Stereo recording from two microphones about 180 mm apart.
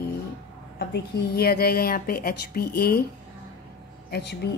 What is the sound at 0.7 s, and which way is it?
Speech, 65° left (ahead or behind).